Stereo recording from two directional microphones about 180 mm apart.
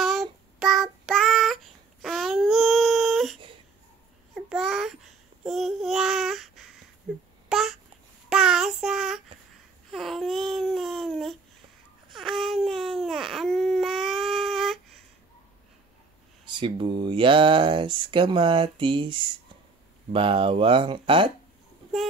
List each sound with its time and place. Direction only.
0.0 s child singing: centre (ahead or behind)
4.5 s babbling: centre (ahead or behind)
8.3 s child singing: 5° right (ahead or behind)
9.8 s babbling: centre (ahead or behind)
12.1 s baby cry: centre (ahead or behind)
16.4 s speech: 25° right (ahead or behind)